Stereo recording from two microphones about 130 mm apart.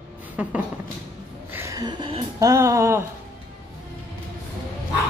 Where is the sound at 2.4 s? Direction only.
25° right (ahead or behind).